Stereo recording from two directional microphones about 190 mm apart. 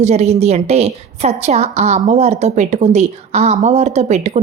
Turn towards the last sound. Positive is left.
turn(degrees=-35)  # may be behind; listen again after turning